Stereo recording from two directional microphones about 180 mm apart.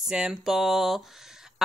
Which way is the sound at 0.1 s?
5° right (ahead or behind).